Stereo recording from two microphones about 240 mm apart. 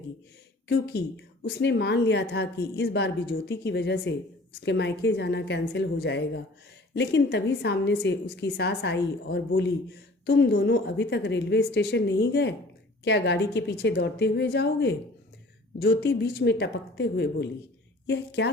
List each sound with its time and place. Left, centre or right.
0.7 s a woman's voice: left